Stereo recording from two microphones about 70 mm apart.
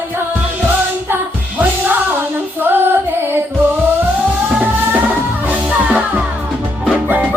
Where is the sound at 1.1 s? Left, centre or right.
Right.